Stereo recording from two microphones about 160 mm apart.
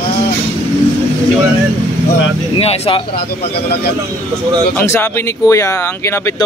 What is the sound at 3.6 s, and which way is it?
Speech, 80° left.